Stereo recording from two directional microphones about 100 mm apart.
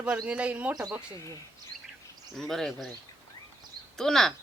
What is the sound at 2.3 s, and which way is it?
Speech, 5° left (ahead or behind).